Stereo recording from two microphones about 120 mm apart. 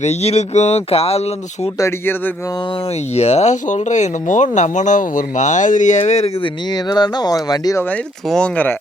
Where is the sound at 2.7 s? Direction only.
55° left (ahead or behind); by 7.8 s 30° left (ahead or behind).